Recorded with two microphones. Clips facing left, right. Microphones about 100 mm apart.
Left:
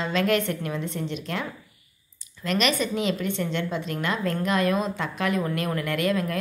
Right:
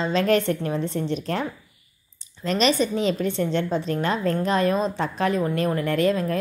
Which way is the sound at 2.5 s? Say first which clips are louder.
Right 3 dB; 30° right (ahead or behind).